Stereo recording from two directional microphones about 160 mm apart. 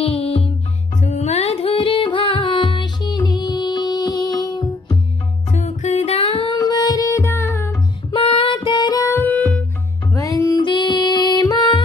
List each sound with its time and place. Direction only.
0.0 s music: 35° left (ahead or behind)
5.5 s music: 45° left (ahead or behind); by 7.7 s 20° left (ahead or behind)
8.1 s music: 35° left (ahead or behind); by 9.7 s 5° left (ahead or behind)
10.1 s music: 20° left (ahead or behind)